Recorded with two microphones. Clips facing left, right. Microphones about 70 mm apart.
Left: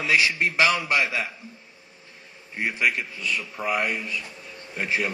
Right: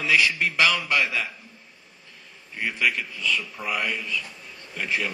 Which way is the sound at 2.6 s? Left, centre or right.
Left.